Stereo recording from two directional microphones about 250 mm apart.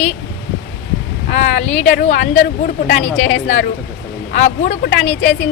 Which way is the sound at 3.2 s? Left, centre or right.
Left.